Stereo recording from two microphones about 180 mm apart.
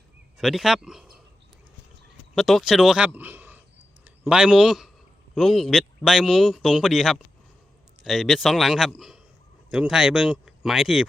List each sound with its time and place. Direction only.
0.3 s speech: centre (ahead or behind)
2.3 s speech: centre (ahead or behind)